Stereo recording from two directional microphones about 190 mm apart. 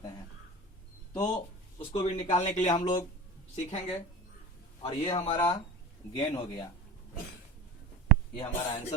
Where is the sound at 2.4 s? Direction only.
40° left (ahead or behind).